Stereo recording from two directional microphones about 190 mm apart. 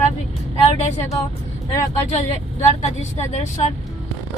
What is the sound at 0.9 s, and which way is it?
Speech, 10° left (ahead or behind).